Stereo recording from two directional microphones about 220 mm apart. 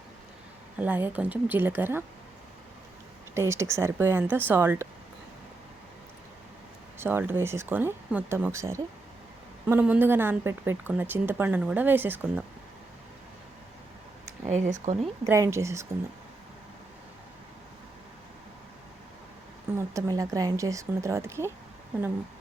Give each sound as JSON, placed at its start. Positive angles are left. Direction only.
{"t": 0.8, "sound": "speech", "side_deg": -10}
{"t": 3.3, "sound": "speech", "side_deg": -10}
{"t": 7.0, "sound": "speech", "side_deg": -10}
{"t": 14.4, "sound": "speech", "side_deg": -30}
{"t": 15.2, "sound": "speech", "side_deg": -15}
{"t": 19.7, "sound": "speech", "side_deg": -15}